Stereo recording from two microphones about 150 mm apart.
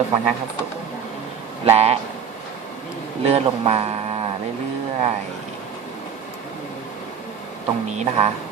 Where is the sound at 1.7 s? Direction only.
45° right (ahead or behind).